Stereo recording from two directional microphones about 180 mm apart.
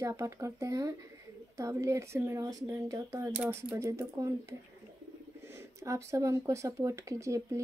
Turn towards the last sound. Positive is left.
turn(degrees=-15)  # may be behind; listen again after turning